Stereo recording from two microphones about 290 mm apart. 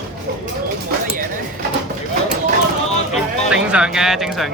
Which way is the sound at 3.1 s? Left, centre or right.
Centre.